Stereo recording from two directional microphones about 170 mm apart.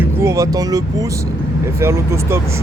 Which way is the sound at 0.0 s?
15° right (ahead or behind).